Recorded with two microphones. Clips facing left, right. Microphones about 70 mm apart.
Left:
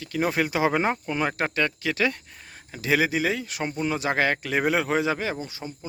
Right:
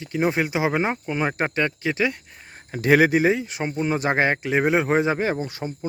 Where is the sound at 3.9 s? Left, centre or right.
Right.